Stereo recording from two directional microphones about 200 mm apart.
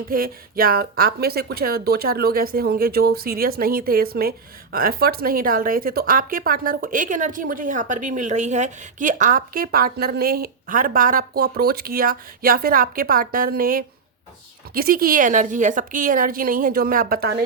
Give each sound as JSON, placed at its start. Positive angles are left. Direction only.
{"t": 0.1, "sound": "speech", "side_deg": -45}